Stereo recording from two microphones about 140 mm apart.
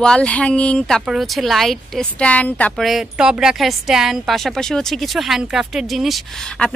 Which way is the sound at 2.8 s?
5° right (ahead or behind).